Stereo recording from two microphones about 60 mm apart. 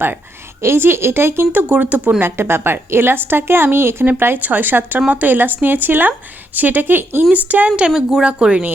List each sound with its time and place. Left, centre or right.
0.6 s speech: right
1.6 s speech: right
2.2 s a woman's voice: right
4.4 s a woman's voice: right
4.9 s a woman's voice: right
7.8 s speech: centre